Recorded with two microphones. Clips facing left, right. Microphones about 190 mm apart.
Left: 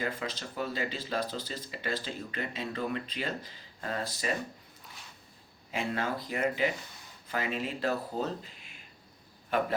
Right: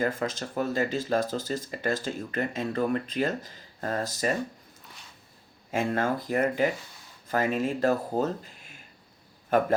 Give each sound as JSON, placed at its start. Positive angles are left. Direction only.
{"t": 0.0, "sound": "speech", "side_deg": -45}
{"t": 5.7, "sound": "speech", "side_deg": -50}